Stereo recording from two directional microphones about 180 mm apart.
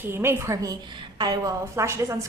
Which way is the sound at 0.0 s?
15° right (ahead or behind).